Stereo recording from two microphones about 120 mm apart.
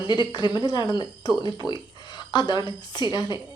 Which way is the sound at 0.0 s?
40° left (ahead or behind).